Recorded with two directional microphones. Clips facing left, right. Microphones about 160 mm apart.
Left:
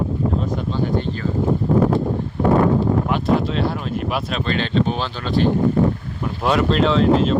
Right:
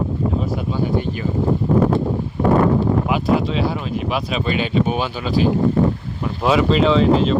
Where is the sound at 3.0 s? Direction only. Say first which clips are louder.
Right 1 dB; 5° right (ahead or behind).